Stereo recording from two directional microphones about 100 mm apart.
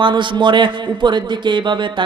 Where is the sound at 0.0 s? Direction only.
50° right (ahead or behind).